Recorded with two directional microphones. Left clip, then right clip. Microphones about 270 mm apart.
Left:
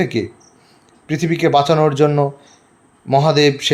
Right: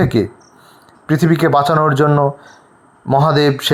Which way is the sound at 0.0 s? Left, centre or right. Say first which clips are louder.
Right 4 dB; centre.